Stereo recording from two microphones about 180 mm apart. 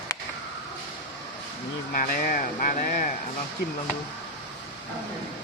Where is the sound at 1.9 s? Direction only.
50° left (ahead or behind).